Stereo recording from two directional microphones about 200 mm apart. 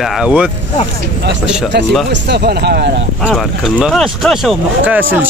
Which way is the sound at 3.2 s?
5° right (ahead or behind).